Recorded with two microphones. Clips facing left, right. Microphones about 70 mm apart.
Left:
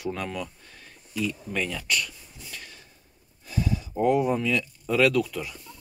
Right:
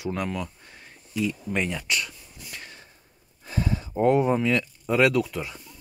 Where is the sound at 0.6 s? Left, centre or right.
Right.